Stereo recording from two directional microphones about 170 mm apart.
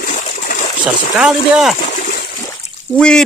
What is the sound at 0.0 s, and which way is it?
Stream, 45° left (ahead or behind).